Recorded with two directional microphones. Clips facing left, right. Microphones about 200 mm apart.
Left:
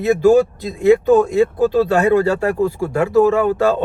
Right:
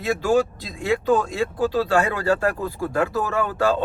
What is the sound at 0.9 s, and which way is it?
Speech, 20° left (ahead or behind).